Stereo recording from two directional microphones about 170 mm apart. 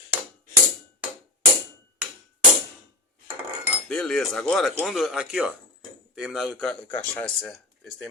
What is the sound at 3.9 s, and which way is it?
Speech, 5° left (ahead or behind).